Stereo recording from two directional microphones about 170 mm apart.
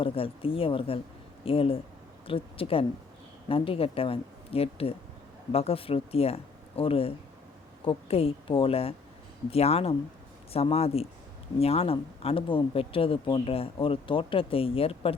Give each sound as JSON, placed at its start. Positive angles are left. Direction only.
{"t": 0.0, "sound": "speech", "side_deg": 35}